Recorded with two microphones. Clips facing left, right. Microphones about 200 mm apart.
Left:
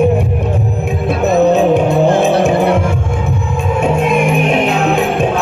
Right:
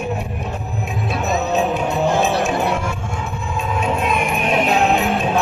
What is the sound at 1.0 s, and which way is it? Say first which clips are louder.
Music: left 11 dB; 55° left (ahead or behind).